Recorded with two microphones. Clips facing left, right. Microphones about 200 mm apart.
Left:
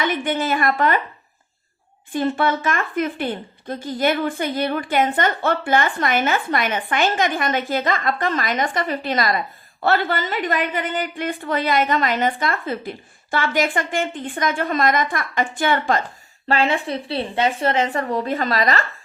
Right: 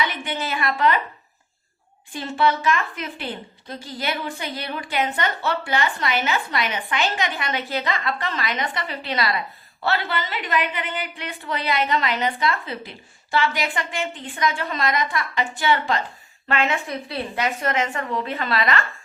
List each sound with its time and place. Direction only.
0.0 s a woman's voice: 50° left (ahead or behind)
2.1 s a woman's voice: 50° left (ahead or behind)
16.5 s a woman's voice: 30° left (ahead or behind)